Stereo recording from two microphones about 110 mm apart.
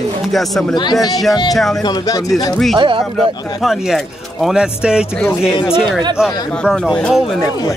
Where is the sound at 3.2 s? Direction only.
Centre (ahead or behind).